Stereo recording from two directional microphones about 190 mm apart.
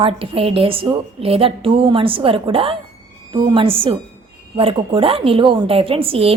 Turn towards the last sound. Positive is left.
turn(degrees=-30)  # may be behind; listen again after turning